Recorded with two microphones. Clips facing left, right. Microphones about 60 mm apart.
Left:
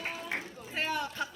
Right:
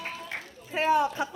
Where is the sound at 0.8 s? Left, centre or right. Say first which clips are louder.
Right 9 dB; centre.